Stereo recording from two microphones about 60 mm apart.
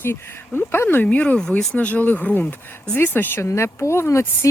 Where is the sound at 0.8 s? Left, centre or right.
Left.